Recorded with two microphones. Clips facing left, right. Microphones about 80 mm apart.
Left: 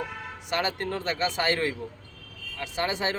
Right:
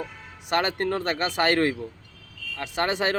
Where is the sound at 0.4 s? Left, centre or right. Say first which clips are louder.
Right 4 dB; right.